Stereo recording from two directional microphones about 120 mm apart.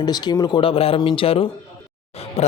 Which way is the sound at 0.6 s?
50° left (ahead or behind).